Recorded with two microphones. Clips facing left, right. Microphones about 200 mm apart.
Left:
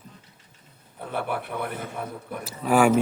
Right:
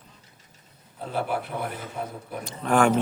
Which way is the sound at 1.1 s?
60° left (ahead or behind).